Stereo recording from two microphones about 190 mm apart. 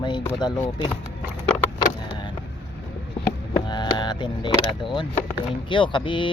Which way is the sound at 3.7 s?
25° left (ahead or behind).